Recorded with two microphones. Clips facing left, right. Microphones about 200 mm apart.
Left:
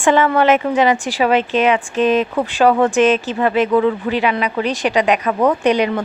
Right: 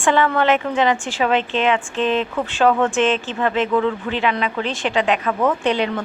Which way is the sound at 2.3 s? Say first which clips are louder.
Left 3 dB; 15° left (ahead or behind).